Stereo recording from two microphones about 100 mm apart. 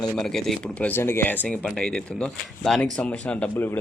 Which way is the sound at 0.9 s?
25° left (ahead or behind).